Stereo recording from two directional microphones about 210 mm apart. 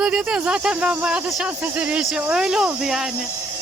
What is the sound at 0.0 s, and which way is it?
Speech, 5° right (ahead or behind).